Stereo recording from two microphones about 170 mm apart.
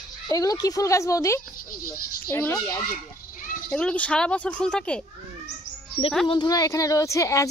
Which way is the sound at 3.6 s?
5° left (ahead or behind).